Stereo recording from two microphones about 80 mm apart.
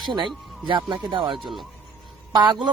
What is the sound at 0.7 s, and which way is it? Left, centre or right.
Speech, right.